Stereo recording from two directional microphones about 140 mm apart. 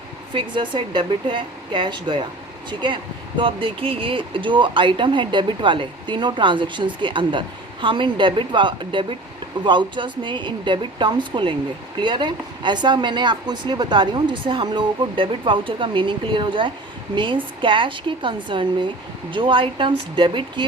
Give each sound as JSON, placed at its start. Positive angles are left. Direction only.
{"t": 0.3, "sound": "speech", "side_deg": -35}